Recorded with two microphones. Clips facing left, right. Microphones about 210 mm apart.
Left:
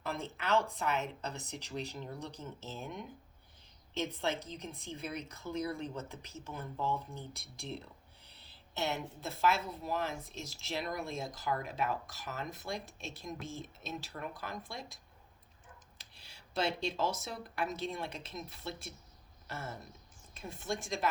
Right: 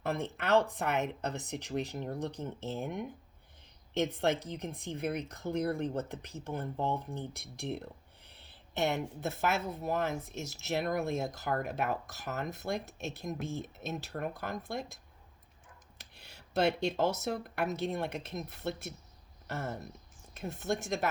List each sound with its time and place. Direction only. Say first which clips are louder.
0.0 s speech: right 5 dB; 60° right (ahead or behind)
16.0 s speech: right 4 dB; 60° right (ahead or behind)